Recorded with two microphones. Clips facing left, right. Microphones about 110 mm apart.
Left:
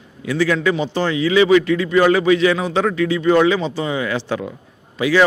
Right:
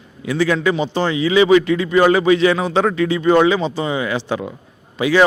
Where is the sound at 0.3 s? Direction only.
25° right (ahead or behind).